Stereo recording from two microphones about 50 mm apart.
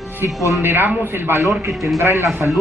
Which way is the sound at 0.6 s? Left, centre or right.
Right.